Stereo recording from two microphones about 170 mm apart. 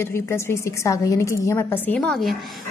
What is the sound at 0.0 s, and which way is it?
A woman's voice, 15° left (ahead or behind).